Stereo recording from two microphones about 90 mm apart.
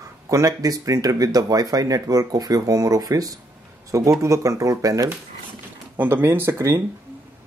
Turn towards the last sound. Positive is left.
turn(degrees=-30)  # may be behind; listen again after turning